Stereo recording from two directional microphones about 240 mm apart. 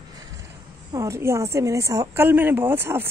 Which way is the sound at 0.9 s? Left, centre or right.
Centre.